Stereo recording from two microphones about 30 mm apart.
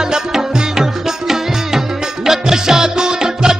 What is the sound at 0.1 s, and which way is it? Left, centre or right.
Music, centre.